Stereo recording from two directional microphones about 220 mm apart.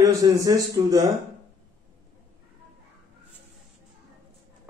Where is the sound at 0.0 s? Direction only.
15° right (ahead or behind).